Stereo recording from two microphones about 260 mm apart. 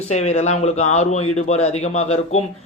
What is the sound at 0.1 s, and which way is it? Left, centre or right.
A man's voice, left.